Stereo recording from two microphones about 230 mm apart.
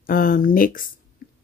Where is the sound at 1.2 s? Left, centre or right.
Left.